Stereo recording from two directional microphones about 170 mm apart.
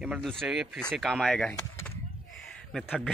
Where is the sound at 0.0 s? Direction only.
Centre (ahead or behind).